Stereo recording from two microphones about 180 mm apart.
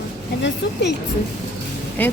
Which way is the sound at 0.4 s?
75° left (ahead or behind).